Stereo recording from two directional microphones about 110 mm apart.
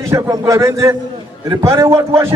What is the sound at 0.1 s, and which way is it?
A man's voice, 30° right (ahead or behind).